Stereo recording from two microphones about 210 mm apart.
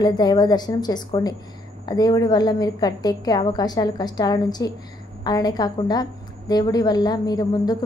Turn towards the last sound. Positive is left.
turn(degrees=20)  # may be behind; listen again after turning